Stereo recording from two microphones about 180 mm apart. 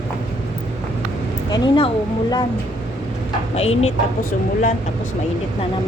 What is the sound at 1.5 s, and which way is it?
Speech, 25° left (ahead or behind).